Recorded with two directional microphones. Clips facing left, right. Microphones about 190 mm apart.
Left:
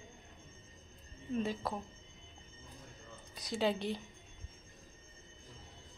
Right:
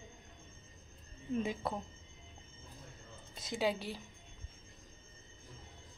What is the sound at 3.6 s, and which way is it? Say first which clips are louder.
Speech: left 2 dB; 10° right (ahead or behind).